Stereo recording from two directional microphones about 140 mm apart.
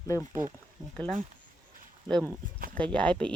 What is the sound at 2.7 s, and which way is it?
Speech, 10° left (ahead or behind).